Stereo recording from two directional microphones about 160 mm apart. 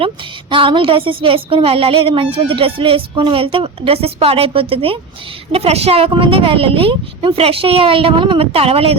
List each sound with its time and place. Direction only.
0.5 s speech: 30° right (ahead or behind)